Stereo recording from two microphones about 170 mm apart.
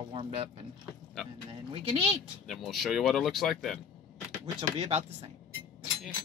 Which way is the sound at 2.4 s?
Centre (ahead or behind).